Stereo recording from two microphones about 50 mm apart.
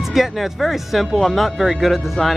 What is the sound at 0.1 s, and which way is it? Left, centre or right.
Speech, centre.